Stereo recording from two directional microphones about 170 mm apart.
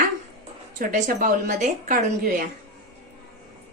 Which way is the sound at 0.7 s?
50° right (ahead or behind).